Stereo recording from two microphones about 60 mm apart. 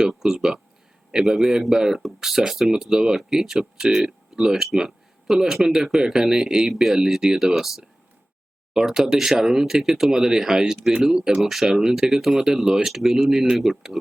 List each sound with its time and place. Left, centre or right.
0.1 s speech: centre